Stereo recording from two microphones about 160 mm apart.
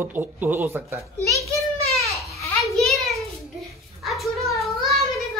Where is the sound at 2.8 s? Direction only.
Centre (ahead or behind).